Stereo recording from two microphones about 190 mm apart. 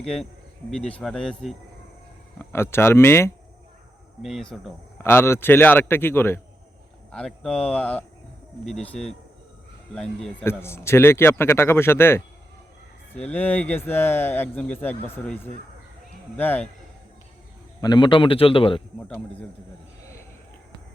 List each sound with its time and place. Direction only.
0.0 s speech: 5° left (ahead or behind)
2.4 s a man's voice: 15° left (ahead or behind)
4.2 s speech: centre (ahead or behind)
5.0 s a man's voice: 10° left (ahead or behind)
17.7 s a man's voice: 20° left (ahead or behind)
18.9 s a man's voice: 5° left (ahead or behind)